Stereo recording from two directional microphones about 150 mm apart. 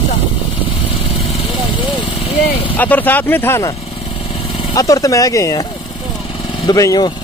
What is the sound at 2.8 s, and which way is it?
Speech, 10° left (ahead or behind).